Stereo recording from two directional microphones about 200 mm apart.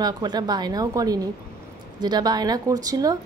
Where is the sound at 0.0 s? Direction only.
20° right (ahead or behind).